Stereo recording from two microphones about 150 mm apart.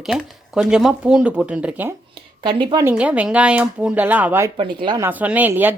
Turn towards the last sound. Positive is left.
turn(degrees=-10)  # may be behind; listen again after turning